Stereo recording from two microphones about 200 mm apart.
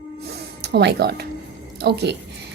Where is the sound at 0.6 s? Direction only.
55° right (ahead or behind).